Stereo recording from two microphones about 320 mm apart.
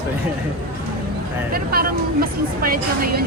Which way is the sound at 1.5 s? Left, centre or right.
Right.